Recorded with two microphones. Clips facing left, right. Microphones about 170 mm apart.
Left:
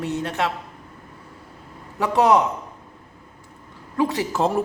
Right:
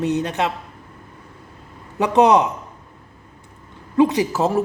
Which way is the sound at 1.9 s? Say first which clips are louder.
Right 3 dB; 20° right (ahead or behind).